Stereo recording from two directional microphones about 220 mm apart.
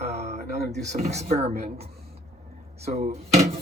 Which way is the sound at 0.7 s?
30° right (ahead or behind).